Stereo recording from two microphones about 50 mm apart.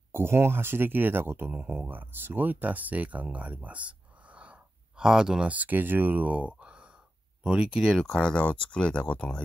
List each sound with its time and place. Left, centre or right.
0.1 s speech: right
1.5 s speech: right
1.9 s speech: right
4.9 s speech: centre
5.5 s speech: right; by 7.9 s centre
8.1 s speech: centre